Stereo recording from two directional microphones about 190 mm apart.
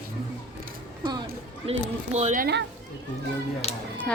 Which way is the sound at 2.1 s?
40° right (ahead or behind).